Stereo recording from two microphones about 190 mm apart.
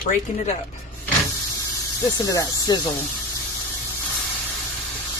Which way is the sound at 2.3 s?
20° left (ahead or behind).